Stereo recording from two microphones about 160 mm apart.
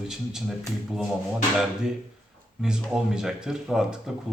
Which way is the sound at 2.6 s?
5° right (ahead or behind).